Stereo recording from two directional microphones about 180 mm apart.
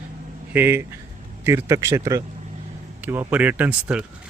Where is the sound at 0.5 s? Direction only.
10° right (ahead or behind).